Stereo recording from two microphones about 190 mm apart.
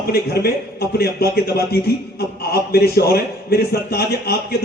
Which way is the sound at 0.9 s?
55° left (ahead or behind).